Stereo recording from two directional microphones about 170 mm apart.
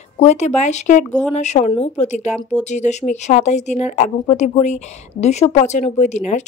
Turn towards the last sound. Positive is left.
turn(degrees=40)  # may be behind; listen again after turning